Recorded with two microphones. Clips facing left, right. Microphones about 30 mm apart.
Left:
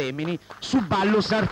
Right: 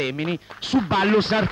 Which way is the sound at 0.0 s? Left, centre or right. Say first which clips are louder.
Right 2 dB; right.